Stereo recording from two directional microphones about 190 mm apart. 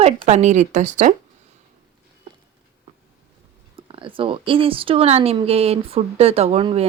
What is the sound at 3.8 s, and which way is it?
Speech, 25° right (ahead or behind).